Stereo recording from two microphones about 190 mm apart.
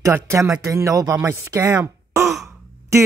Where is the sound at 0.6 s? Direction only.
15° right (ahead or behind).